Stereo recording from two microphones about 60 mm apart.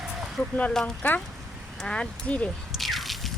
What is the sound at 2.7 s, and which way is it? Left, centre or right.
Drip, centre.